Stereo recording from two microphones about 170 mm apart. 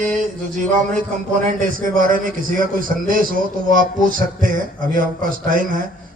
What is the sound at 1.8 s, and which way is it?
Speech, 55° right (ahead or behind).